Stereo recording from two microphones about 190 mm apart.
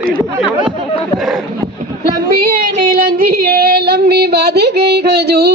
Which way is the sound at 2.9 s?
50° right (ahead or behind).